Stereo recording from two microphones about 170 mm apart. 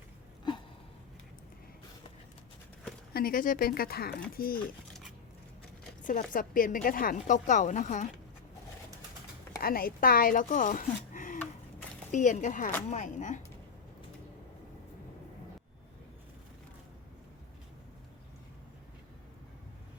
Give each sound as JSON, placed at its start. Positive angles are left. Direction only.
{"t": 3.1, "sound": "speech", "side_deg": 60}
{"t": 6.0, "sound": "zipper", "side_deg": 50}
{"t": 6.3, "sound": "a woman's voice", "side_deg": 55}
{"t": 9.6, "sound": "a woman's voice", "side_deg": 60}